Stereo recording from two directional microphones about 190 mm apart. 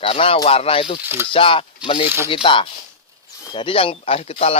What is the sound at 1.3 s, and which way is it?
Speech, 25° left (ahead or behind).